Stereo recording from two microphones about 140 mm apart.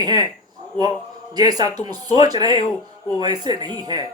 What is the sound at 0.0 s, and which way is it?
Speech, 30° right (ahead or behind).